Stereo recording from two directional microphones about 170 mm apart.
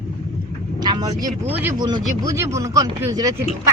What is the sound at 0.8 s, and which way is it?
Speech, 25° right (ahead or behind).